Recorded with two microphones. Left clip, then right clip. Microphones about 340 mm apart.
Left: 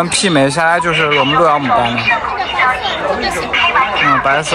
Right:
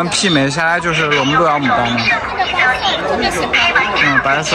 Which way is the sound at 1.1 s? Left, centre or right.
Left.